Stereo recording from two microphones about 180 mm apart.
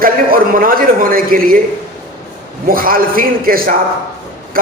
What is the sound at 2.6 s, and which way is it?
A man's voice, 55° right (ahead or behind).